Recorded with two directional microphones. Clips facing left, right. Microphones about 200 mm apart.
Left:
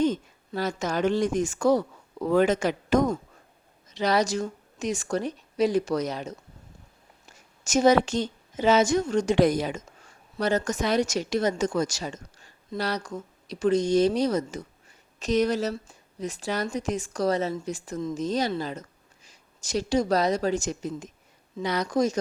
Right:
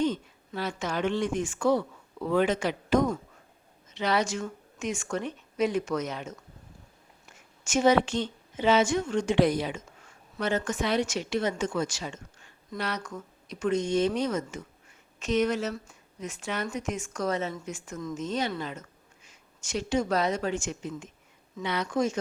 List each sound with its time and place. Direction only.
0.0 s a woman's voice: 45° left (ahead or behind)